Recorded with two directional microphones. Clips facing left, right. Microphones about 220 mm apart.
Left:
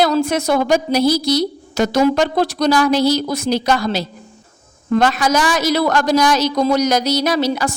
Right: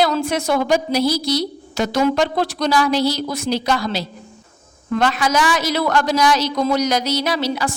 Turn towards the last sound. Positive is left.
turn(degrees=45)  # may be behind; listen again after turning